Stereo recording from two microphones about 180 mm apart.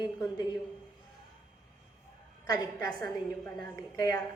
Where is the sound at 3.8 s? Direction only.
15° left (ahead or behind).